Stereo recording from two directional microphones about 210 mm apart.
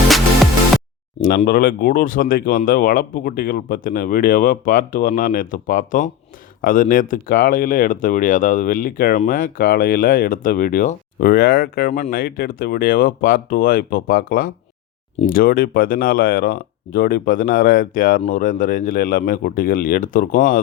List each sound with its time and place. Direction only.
1.5 s speech: 45° left (ahead or behind)